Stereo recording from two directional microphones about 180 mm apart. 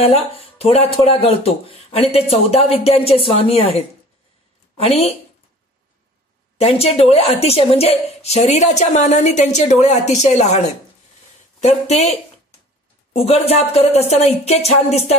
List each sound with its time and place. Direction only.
0.6 s a woman's voice: 35° left (ahead or behind)
6.6 s a woman's voice: 35° left (ahead or behind)